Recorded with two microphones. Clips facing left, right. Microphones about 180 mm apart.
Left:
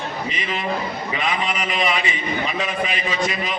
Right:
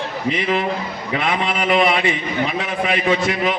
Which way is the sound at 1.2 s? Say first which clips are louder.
Right 4 dB; 65° right (ahead or behind).